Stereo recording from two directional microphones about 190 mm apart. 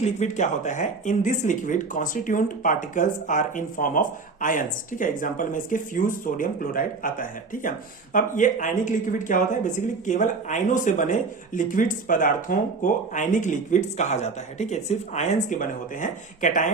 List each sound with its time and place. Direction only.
0.0 s speech: 40° left (ahead or behind)